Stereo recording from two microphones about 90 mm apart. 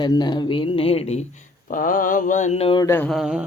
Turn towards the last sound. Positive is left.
turn(degrees=-5)  # may be behind; listen again after turning